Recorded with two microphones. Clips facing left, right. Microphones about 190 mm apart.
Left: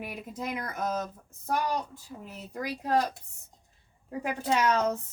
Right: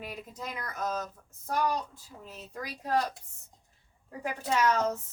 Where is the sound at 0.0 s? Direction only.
15° left (ahead or behind).